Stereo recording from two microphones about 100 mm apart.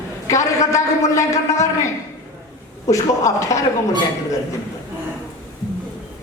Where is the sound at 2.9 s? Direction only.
35° left (ahead or behind).